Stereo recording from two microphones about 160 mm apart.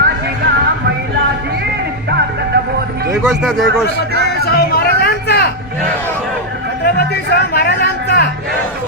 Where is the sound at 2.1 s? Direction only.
90° right.